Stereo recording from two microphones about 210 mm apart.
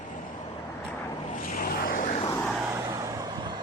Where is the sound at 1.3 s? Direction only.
40° left (ahead or behind).